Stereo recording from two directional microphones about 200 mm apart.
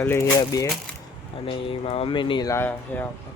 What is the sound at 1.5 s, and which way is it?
Speech, 25° left (ahead or behind).